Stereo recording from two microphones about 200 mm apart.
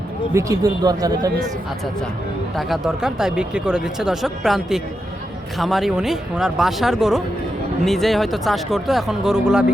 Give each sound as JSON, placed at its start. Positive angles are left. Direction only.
{"t": 0.3, "sound": "speech", "side_deg": -15}
{"t": 2.6, "sound": "speech", "side_deg": 0}